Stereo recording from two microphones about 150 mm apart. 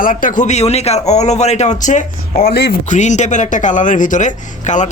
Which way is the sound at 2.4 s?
85° left.